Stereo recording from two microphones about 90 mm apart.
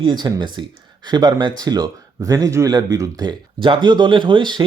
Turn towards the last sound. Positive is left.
turn(degrees=-60)  # may be behind; listen again after turning